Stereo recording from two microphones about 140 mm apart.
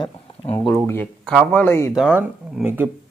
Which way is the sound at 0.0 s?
35° left (ahead or behind).